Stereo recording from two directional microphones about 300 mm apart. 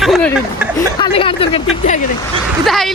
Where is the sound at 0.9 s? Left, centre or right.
Centre.